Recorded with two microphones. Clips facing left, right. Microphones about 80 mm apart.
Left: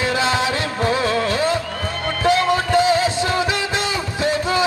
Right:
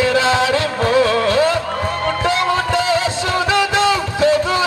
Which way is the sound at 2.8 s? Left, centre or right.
Left.